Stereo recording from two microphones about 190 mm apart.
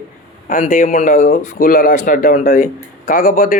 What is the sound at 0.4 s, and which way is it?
A man's voice, 45° left (ahead or behind).